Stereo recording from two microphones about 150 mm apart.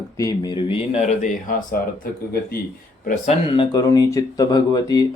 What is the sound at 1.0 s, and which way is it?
Speech, 60° left (ahead or behind).